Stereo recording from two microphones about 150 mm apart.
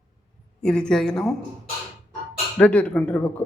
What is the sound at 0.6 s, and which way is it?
Speech, 5° left (ahead or behind).